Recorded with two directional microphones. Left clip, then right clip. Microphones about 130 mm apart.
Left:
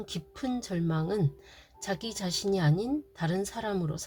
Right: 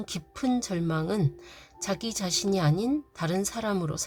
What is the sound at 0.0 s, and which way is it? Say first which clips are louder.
Speech: right 4 dB; 35° right (ahead or behind).